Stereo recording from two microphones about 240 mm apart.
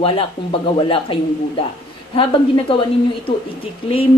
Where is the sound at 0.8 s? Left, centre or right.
Left.